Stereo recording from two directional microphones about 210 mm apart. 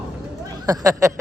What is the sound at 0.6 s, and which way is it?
Speech, 15° right (ahead or behind).